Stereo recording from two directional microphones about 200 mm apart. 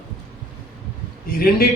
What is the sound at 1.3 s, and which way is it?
Speech, 50° left (ahead or behind).